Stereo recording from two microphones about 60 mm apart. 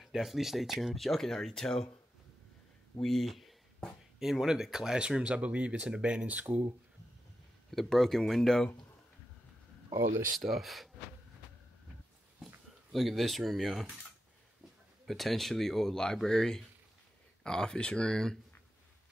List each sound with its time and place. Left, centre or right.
0.0 s speech: centre
3.0 s speech: centre; by 6.4 s right
7.7 s speech: centre
10.3 s speech: centre
12.9 s speech: centre
15.0 s speech: centre